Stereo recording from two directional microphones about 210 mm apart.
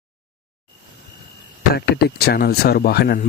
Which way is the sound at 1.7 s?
50° left (ahead or behind).